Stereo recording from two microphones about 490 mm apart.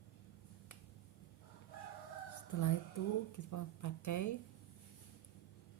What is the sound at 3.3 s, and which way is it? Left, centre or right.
Speech, left.